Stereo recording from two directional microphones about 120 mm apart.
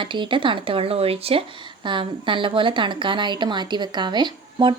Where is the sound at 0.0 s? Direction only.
45° right (ahead or behind).